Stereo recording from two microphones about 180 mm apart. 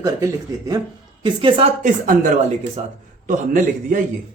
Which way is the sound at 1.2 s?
30° right (ahead or behind).